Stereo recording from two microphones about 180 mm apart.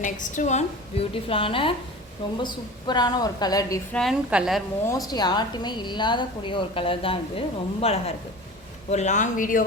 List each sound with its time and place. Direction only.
0.0 s a woman's voice: 45° left (ahead or behind); by 3.8 s 20° left (ahead or behind)
3.9 s a woman's voice: centre (ahead or behind)
4.9 s a woman's voice: 20° left (ahead or behind); by 9.6 s 50° left (ahead or behind)